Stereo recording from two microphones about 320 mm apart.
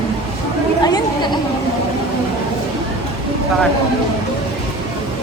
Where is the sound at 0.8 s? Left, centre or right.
Centre.